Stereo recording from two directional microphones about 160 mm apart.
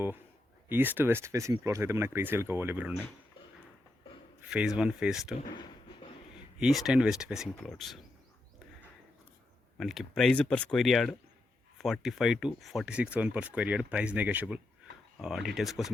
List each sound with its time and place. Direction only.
0.7 s speech: 10° right (ahead or behind)
4.4 s speech: 5° right (ahead or behind)
6.6 s speech: centre (ahead or behind)
9.7 s speech: centre (ahead or behind)